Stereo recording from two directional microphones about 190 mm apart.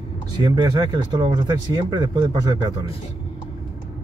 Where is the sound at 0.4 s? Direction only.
20° right (ahead or behind).